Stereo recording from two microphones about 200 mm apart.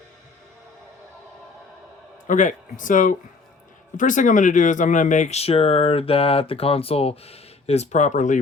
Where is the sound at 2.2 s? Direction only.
40° left (ahead or behind).